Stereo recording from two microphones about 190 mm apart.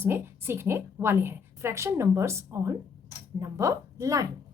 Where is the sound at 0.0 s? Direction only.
10° right (ahead or behind).